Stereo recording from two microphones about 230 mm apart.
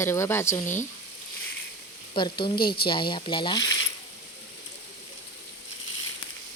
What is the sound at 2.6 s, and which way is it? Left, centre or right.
Speech, left.